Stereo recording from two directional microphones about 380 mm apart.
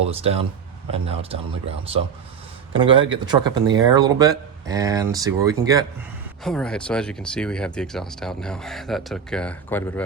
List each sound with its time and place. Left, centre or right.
0.1 s speech: centre
6.4 s speech: centre